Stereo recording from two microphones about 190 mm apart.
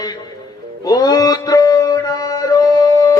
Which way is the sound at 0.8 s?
20° left (ahead or behind).